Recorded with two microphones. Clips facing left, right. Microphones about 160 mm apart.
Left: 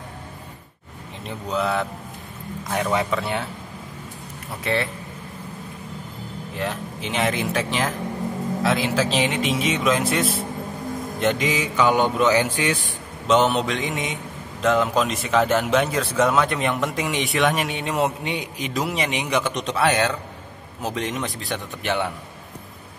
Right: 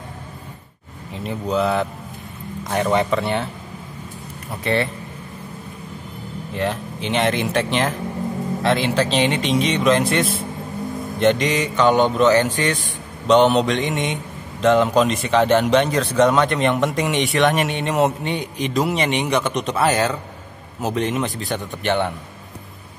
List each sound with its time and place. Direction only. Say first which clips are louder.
1.1 s a man's voice: right 5 dB; centre (ahead or behind)
4.7 s a man's voice: right 3 dB; centre (ahead or behind)
6.5 s a man's voice: right 5 dB; centre (ahead or behind)